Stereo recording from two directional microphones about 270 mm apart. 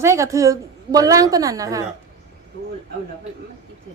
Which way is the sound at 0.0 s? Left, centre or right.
Centre.